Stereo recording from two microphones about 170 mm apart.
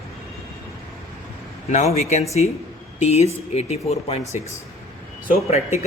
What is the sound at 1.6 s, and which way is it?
A man's voice, 45° left (ahead or behind).